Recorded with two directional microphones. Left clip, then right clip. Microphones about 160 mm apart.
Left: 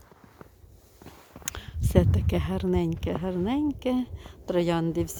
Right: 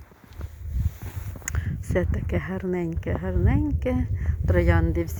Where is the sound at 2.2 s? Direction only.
35° left (ahead or behind).